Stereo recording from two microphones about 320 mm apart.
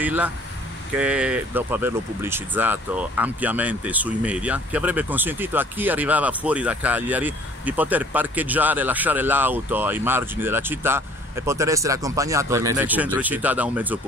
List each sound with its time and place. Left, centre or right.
0.0 s speech: centre